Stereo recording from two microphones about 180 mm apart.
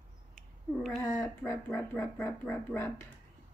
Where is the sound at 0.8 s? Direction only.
Centre (ahead or behind).